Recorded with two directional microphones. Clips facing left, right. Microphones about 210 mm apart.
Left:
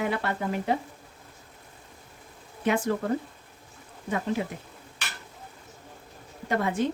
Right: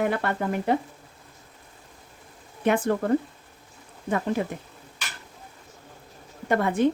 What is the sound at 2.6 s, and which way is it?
Speech, 55° right (ahead or behind).